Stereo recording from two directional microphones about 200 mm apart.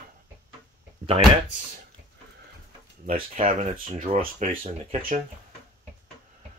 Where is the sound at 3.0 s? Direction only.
40° right (ahead or behind).